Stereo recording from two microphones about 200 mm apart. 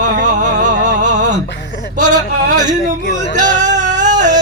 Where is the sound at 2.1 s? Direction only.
20° right (ahead or behind).